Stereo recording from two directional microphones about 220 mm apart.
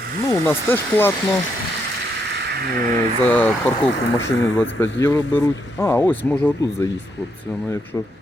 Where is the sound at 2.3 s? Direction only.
50° right (ahead or behind).